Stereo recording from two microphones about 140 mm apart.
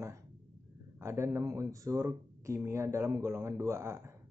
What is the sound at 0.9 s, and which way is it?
Speech, 20° right (ahead or behind).